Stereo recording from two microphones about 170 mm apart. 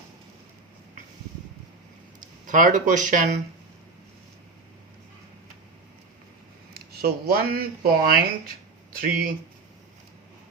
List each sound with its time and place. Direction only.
2.2 s speech: 50° right (ahead or behind)
6.7 s speech: 65° right (ahead or behind)